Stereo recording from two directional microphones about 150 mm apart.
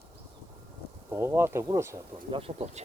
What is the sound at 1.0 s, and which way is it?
Speech, 15° right (ahead or behind).